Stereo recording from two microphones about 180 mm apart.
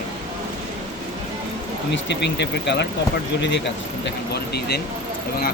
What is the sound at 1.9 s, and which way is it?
Speech, 75° left (ahead or behind).